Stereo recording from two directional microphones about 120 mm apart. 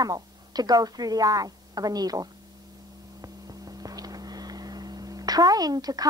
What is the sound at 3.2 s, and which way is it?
Vehicle, 30° right (ahead or behind).